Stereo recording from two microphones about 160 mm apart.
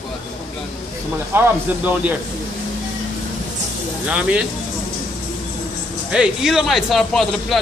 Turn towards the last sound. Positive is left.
turn(degrees=0)  # may be behind; listen again after turning